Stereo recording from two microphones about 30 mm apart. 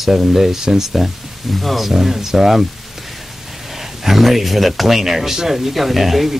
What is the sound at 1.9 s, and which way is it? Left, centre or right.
Speech, centre.